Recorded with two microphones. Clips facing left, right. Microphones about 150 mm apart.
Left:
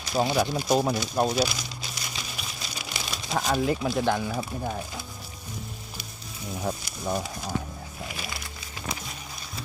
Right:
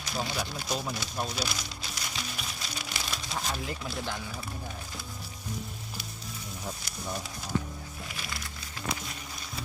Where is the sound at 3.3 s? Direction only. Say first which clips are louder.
Left 11 dB; 70° left (ahead or behind).